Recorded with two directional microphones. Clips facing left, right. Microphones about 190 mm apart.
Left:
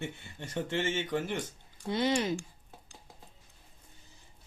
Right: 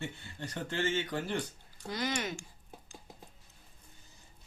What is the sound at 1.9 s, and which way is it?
Speech, 30° left (ahead or behind).